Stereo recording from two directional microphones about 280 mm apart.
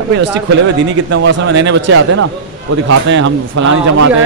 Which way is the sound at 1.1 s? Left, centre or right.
Right.